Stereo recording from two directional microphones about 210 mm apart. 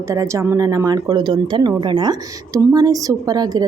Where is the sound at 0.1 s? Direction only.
15° right (ahead or behind).